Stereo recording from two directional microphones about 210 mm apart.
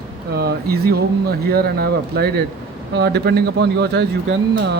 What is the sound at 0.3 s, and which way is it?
Speech, 50° right (ahead or behind).